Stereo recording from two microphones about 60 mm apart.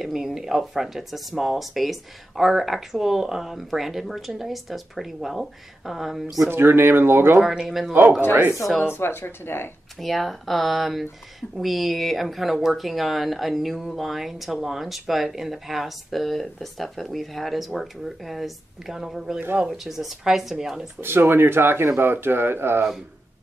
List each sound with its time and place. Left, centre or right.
0.0 s speech: centre
6.5 s speech: right
7.3 s speech: centre
8.9 s speech: left
9.9 s speech: centre
21.0 s speech: right